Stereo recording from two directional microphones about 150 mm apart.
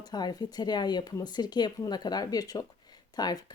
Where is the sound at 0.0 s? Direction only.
25° left (ahead or behind).